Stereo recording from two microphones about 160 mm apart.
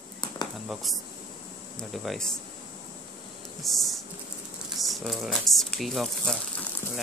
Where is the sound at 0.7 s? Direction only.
Centre (ahead or behind).